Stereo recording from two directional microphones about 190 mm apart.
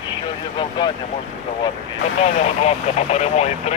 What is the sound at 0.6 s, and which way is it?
Speech, 25° left (ahead or behind).